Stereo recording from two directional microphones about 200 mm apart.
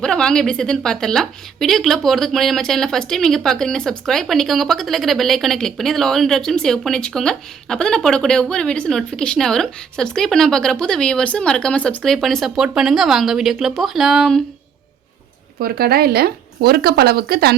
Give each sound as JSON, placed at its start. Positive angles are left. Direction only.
{"t": 0.0, "sound": "a woman's voice", "side_deg": 5}
{"t": 15.5, "sound": "speech", "side_deg": -50}